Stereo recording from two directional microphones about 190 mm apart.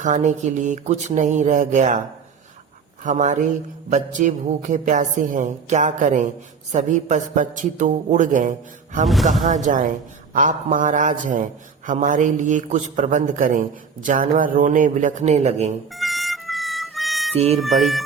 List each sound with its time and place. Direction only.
0.0 s a man's voice: 40° right (ahead or behind)
3.0 s a man's voice: 40° right (ahead or behind)
16.0 s music: centre (ahead or behind)
17.3 s a man's voice: 35° right (ahead or behind)
17.6 s music: centre (ahead or behind)